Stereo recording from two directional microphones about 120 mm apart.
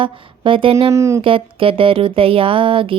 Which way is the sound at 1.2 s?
50° right (ahead or behind).